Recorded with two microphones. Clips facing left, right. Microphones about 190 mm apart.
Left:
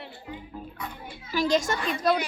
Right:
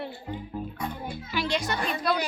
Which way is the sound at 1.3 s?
40° left (ahead or behind).